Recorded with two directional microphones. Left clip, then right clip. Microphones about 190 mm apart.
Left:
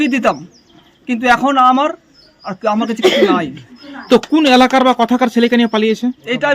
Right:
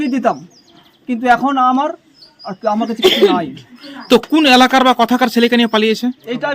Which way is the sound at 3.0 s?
25° left (ahead or behind).